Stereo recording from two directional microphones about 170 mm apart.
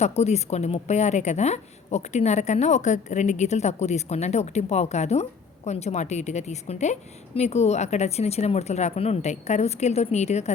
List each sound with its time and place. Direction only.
0.0 s a woman's voice: 40° left (ahead or behind)